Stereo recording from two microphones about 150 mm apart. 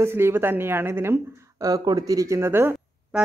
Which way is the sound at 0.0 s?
15° right (ahead or behind).